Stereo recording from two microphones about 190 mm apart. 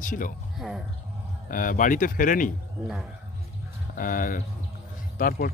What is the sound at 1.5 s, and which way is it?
Speech, 45° left (ahead or behind).